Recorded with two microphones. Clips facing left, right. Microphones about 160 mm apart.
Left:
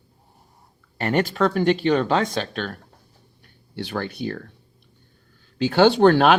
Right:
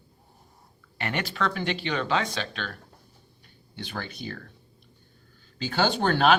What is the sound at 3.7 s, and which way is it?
Speech, 60° left (ahead or behind).